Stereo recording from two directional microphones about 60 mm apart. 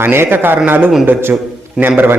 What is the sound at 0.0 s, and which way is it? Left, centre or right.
A man's voice, right.